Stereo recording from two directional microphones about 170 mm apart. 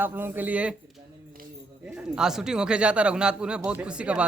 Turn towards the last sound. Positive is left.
turn(degrees=-5)  # may be behind; listen again after turning